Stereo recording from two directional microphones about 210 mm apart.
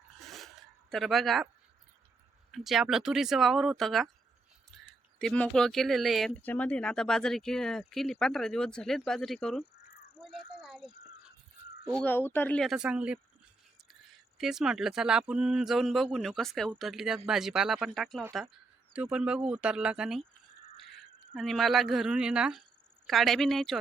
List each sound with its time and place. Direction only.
0.3 s zipper: centre (ahead or behind)
2.5 s speech: centre (ahead or behind)
10.2 s a sound: centre (ahead or behind)
10.8 s a sound: 25° right (ahead or behind)
11.9 s speech: 10° left (ahead or behind)
14.3 s speech: centre (ahead or behind)
21.3 s speech: centre (ahead or behind)